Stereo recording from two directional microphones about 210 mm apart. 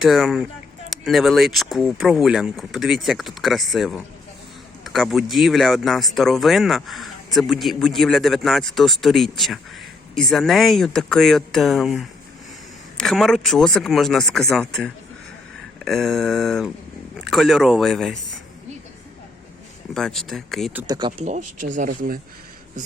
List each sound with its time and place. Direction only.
0.0 s speech: centre (ahead or behind)
19.9 s speech: centre (ahead or behind)
20.8 s speech: 20° right (ahead or behind)
21.2 s speech: 35° right (ahead or behind)